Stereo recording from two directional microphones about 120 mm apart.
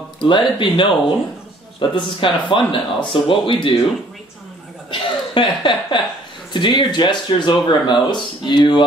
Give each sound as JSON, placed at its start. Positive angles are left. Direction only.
{"t": 0.2, "sound": "a man's voice", "side_deg": 45}
{"t": 4.9, "sound": "speech", "side_deg": 45}